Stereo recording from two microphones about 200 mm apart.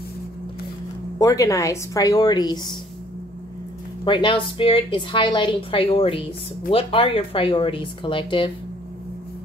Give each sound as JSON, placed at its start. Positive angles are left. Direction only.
{"t": 1.2, "sound": "a woman's voice", "side_deg": 15}
{"t": 4.0, "sound": "a woman's voice", "side_deg": 25}